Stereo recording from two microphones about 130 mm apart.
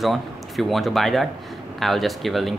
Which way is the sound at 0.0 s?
Centre (ahead or behind).